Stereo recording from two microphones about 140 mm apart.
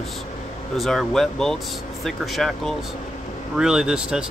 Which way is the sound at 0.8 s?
Centre (ahead or behind).